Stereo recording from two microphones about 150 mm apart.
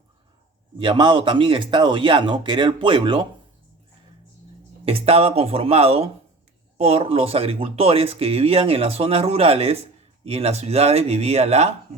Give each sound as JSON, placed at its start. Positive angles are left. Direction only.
{"t": 0.8, "sound": "speech", "side_deg": -35}
{"t": 4.9, "sound": "speech", "side_deg": -40}